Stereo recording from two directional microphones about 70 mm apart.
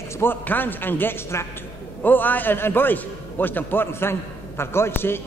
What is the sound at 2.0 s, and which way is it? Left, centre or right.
A man's voice, left.